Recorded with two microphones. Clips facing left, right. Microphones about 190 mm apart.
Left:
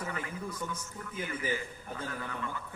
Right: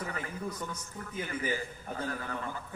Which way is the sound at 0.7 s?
35° right (ahead or behind).